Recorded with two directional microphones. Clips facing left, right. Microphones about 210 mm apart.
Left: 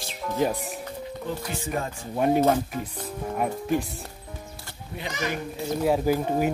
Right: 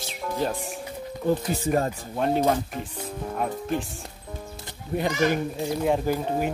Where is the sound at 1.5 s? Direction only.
40° right (ahead or behind).